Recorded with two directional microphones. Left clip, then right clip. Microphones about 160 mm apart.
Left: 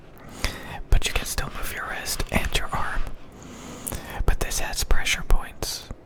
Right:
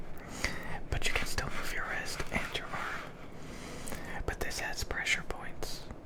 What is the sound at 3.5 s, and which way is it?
Whispering, 35° left (ahead or behind).